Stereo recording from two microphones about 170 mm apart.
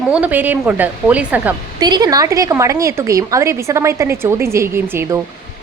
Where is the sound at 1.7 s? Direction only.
25° right (ahead or behind).